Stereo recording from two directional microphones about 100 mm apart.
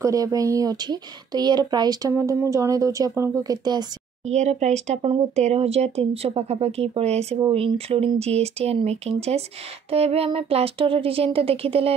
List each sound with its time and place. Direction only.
0.0 s speech: 35° right (ahead or behind)
2.1 s speech: 30° right (ahead or behind)
4.5 s speech: 90° right
7.5 s speech: 75° right (ahead or behind)
8.2 s speech: 90° right